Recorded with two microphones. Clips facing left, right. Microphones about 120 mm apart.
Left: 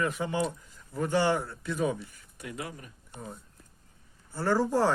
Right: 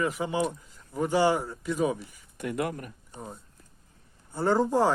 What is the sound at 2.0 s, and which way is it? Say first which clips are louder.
Speech: right 7 dB; 60° right (ahead or behind).